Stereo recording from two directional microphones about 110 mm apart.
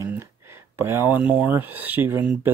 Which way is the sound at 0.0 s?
25° right (ahead or behind).